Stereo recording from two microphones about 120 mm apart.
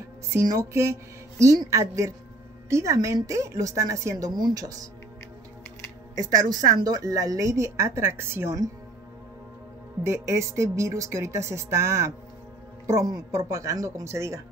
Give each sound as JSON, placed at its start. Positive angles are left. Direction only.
{"t": 0.3, "sound": "a woman's voice", "side_deg": -25}
{"t": 6.1, "sound": "a woman's voice", "side_deg": -30}
{"t": 10.0, "sound": "a woman's voice", "side_deg": -25}